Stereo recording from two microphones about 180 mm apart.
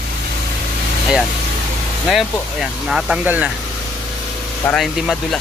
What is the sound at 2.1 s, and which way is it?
Speech, 5° right (ahead or behind).